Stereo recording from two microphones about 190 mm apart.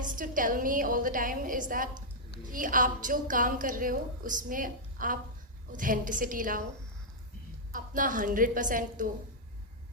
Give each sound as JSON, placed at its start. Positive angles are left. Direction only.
{"t": 0.0, "sound": "a woman's voice", "side_deg": -45}
{"t": 7.7, "sound": "a woman's voice", "side_deg": -45}